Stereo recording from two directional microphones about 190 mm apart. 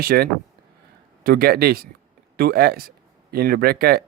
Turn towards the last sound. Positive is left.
turn(degrees=-55)  # may be behind; listen again after turning